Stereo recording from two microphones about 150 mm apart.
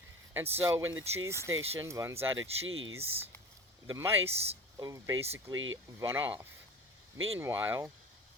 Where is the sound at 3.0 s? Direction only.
40° right (ahead or behind).